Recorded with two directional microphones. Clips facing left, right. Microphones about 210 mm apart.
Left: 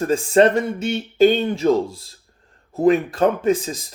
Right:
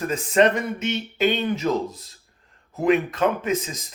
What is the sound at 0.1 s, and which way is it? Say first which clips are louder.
Speech: left 4 dB; 30° left (ahead or behind).